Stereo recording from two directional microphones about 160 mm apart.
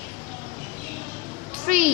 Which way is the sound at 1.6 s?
55° right (ahead or behind).